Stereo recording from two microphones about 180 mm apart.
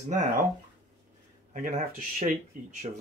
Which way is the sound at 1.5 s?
45° right (ahead or behind).